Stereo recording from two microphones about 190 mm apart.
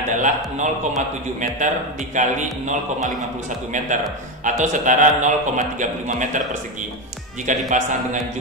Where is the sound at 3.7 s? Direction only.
40° right (ahead or behind).